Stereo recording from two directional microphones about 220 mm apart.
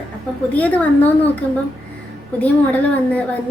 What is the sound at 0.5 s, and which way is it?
Speech, 5° left (ahead or behind).